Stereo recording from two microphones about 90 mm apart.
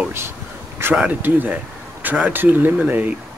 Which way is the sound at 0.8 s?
25° right (ahead or behind).